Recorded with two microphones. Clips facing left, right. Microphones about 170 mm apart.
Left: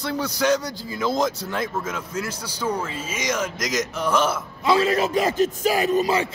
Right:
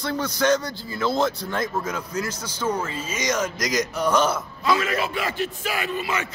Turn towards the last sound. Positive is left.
turn(degrees=35)  # may be behind; listen again after turning